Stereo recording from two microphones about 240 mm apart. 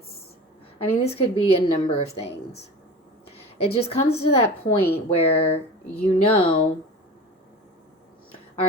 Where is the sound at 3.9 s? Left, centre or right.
Left.